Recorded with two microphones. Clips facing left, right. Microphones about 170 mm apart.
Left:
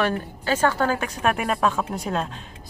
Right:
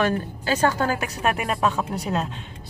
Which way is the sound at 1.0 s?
5° right (ahead or behind).